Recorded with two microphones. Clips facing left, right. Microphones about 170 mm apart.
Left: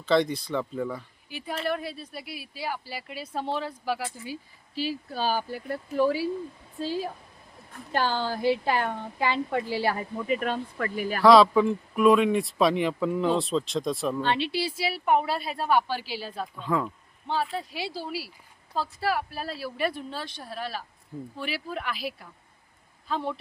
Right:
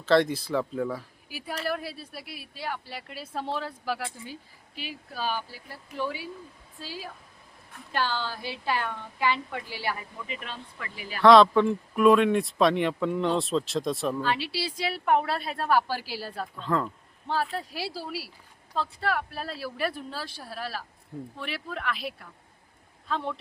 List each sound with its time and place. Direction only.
0.0 s speech: centre (ahead or behind)
4.7 s speech: 30° left (ahead or behind)
5.5 s speech: 55° left (ahead or behind)
8.0 s speech: 50° left (ahead or behind)
8.4 s a woman's voice: 25° left (ahead or behind); by 11.2 s 50° left (ahead or behind)
11.2 s speech: centre (ahead or behind)
14.2 s a woman's voice: 25° left (ahead or behind)
14.7 s speech: 5° left (ahead or behind)
16.6 s speech: 5° left (ahead or behind)